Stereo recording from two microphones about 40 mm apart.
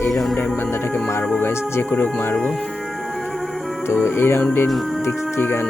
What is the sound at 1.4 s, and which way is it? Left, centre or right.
Speech, left.